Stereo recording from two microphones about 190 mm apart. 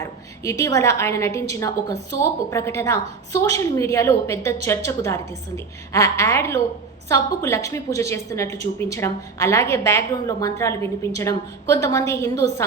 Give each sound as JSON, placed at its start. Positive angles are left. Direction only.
{"t": 0.0, "sound": "a woman's voice", "side_deg": 15}